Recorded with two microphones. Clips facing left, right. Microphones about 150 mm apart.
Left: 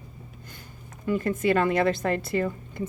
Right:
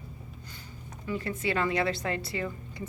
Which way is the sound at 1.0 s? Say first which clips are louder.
Left 7 dB; 50° left (ahead or behind).